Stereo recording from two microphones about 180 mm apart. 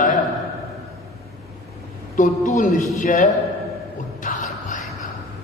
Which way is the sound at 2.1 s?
45° left (ahead or behind).